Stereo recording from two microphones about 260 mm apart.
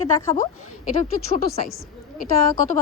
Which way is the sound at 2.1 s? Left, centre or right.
Left.